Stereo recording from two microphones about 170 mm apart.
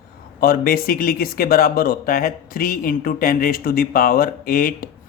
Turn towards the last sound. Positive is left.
turn(degrees=60)  # may be behind; listen again after turning